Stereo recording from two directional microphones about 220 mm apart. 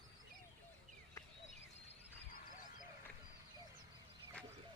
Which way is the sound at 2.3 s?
40° left (ahead or behind).